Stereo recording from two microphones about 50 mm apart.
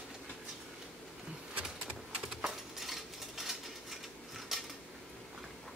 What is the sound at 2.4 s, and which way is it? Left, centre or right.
Dishes, centre.